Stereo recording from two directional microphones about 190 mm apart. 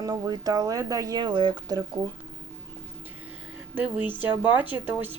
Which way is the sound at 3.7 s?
10° right (ahead or behind).